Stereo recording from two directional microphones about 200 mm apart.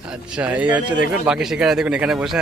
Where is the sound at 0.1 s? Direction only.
5° right (ahead or behind).